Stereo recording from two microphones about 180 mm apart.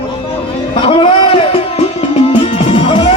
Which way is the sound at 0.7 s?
30° left (ahead or behind).